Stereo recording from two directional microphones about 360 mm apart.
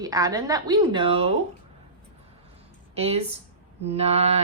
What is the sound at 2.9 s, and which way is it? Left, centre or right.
A woman's voice, centre.